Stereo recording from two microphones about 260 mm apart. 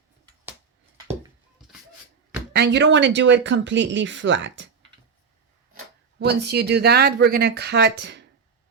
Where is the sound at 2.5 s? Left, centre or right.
Right.